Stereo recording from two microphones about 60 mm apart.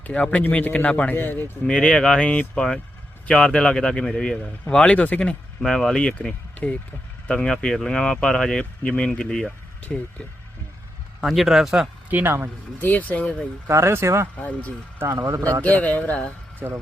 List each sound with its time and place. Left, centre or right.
0.0 s speech: left
1.1 s speech: left
1.6 s speech: centre
5.6 s speech: centre
9.9 s speech: left
11.2 s speech: centre
12.1 s speech: right
12.8 s speech: left
13.7 s speech: right
14.3 s speech: left
15.3 s speech: right
15.6 s speech: left